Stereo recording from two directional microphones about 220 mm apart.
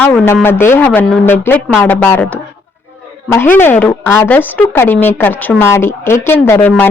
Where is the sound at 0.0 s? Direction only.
10° left (ahead or behind).